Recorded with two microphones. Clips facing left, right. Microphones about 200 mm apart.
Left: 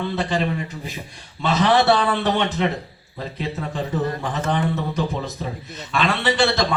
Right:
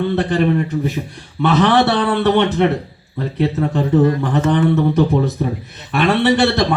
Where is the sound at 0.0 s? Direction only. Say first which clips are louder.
Right 7 dB; 60° right (ahead or behind).